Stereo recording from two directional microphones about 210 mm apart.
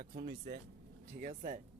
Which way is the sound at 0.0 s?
45° right (ahead or behind).